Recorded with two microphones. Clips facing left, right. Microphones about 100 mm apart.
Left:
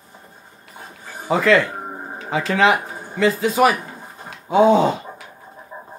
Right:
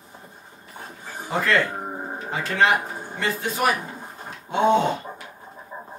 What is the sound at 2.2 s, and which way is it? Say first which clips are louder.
Speech: left 5 dB; 90° left.